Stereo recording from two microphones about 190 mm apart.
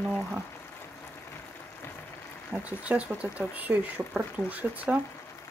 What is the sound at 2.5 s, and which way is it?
Speech, 5° right (ahead or behind).